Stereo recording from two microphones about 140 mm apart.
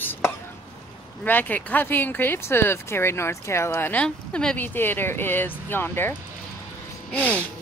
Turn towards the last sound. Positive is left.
turn(degrees=10)  # may be behind; listen again after turning